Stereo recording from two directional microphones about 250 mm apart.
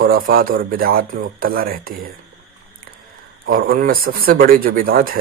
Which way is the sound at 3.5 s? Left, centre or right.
Right.